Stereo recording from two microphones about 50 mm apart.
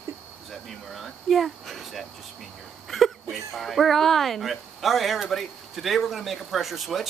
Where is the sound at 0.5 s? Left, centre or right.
Centre.